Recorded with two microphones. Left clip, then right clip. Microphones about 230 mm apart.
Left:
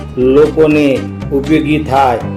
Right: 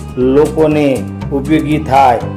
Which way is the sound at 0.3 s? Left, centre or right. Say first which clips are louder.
Left 2 dB; centre.